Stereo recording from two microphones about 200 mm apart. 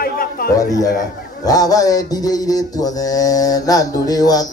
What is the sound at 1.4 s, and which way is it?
Mantra, 20° left (ahead or behind).